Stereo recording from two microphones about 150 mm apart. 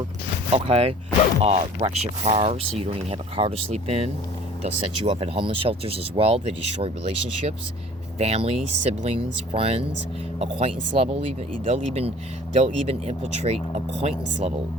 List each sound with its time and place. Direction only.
0.5 s speech: 40° right (ahead or behind)